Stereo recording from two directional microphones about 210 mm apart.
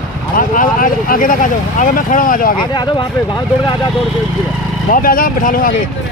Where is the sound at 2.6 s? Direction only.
20° left (ahead or behind).